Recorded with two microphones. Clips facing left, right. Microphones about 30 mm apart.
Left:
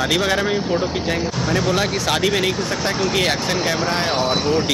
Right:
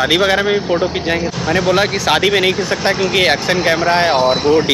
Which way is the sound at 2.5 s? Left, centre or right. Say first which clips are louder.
Right 5 dB; right.